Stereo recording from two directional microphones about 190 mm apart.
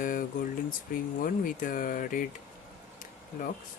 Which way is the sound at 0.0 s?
45° left (ahead or behind).